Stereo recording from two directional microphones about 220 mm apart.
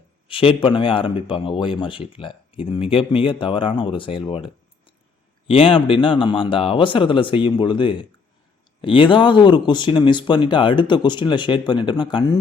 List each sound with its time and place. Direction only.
0.3 s speech: 25° left (ahead or behind)